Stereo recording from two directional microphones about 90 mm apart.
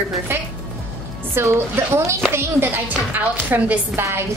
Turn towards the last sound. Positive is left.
turn(degrees=-30)  # may be behind; listen again after turning